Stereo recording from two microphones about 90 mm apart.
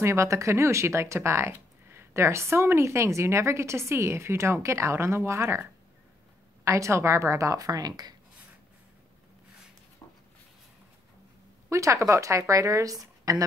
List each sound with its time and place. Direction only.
0.0 s speech: 30° right (ahead or behind); by 8.1 s 45° right (ahead or behind)
11.7 s speech: 35° right (ahead or behind)